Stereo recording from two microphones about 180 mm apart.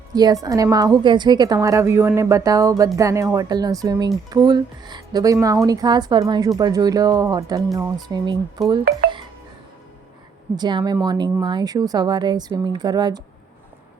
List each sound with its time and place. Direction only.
0.1 s a woman's voice: 20° right (ahead or behind)
10.5 s speech: 25° right (ahead or behind)